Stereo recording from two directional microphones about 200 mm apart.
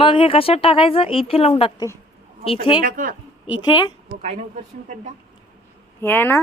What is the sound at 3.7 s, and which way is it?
Speech, 20° left (ahead or behind).